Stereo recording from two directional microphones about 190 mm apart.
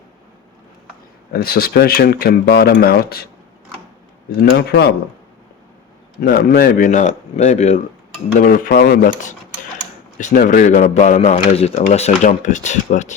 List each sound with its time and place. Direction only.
1.3 s speech: 55° left (ahead or behind)
4.3 s speech: 60° left (ahead or behind)
6.1 s speech: 50° left (ahead or behind)
8.4 s speech: 50° left (ahead or behind)